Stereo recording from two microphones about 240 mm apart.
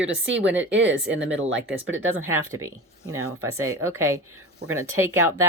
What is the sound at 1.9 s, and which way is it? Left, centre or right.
Speech, right.